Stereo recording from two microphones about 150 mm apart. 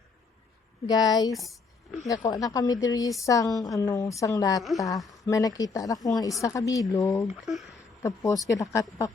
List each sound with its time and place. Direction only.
0.9 s a woman's voice: 25° left (ahead or behind)
1.3 s a sound: centre (ahead or behind)
2.0 s a woman's voice: 25° left (ahead or behind)
7.4 s speech: centre (ahead or behind)
8.0 s a woman's voice: 25° left (ahead or behind)